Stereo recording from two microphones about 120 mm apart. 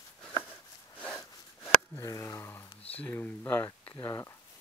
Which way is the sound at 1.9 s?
30° left (ahead or behind).